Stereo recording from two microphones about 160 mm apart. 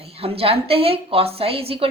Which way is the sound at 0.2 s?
35° right (ahead or behind).